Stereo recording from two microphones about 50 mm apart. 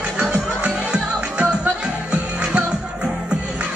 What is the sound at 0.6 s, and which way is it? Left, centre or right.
Music, right.